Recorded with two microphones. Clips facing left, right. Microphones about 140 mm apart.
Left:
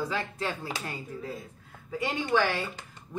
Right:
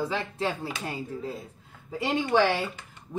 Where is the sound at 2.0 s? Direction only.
30° right (ahead or behind).